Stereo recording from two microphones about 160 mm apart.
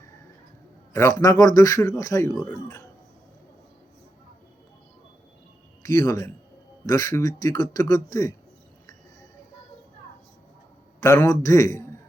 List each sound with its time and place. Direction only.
1.2 s speech: 20° left (ahead or behind)
5.8 s speech: 20° left (ahead or behind)
11.0 s speech: 20° left (ahead or behind)